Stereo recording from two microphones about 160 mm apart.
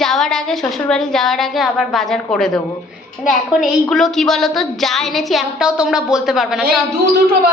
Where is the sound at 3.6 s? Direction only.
Centre (ahead or behind).